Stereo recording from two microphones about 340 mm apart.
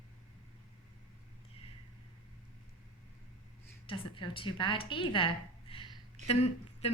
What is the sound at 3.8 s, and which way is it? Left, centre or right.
A woman's voice, centre.